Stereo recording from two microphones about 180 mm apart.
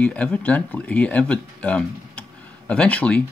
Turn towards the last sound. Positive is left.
turn(degrees=10)  # may be behind; listen again after turning